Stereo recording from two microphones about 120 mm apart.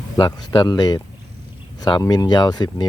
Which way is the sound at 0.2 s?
35° left (ahead or behind).